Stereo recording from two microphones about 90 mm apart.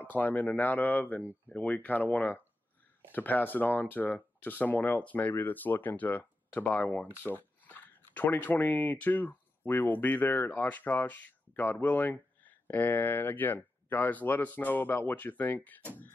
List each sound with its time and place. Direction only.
0.1 s speech: 20° left (ahead or behind)